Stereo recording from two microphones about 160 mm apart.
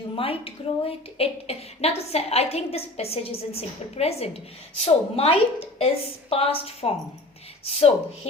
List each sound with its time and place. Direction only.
0.2 s a woman's voice: 35° left (ahead or behind)